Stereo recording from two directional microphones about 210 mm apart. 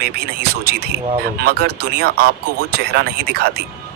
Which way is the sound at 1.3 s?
50° right (ahead or behind).